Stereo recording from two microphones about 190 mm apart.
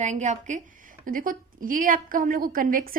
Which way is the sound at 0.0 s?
40° right (ahead or behind).